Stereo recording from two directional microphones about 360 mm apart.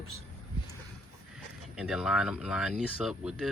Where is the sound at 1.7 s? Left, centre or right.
Centre.